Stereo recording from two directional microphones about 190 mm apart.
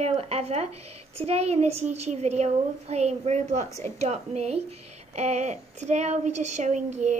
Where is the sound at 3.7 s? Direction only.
15° left (ahead or behind).